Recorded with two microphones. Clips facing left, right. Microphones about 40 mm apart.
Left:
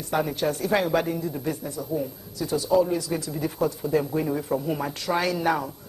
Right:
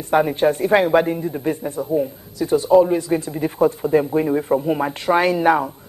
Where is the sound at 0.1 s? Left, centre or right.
Right.